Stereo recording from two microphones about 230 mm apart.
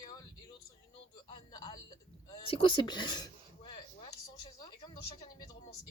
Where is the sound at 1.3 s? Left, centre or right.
Centre.